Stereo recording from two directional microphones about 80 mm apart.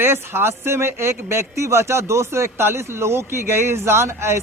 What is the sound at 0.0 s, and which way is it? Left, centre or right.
Speech, right.